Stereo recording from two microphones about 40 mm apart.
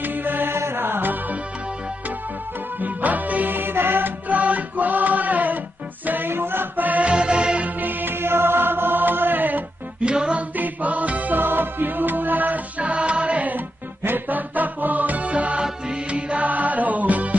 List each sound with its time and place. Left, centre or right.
0.0 s music: right
2.8 s music: right
3.5 s music: right
4.3 s music: right
6.3 s chant: right
6.9 s music: right
7.8 s music: right
10.0 s music: right
10.6 s music: right
14.0 s music: right